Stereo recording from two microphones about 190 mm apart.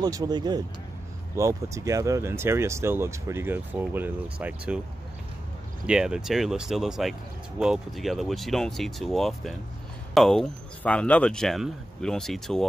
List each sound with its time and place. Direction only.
0.0 s speech: 20° right (ahead or behind)
5.9 s speech: 5° right (ahead or behind)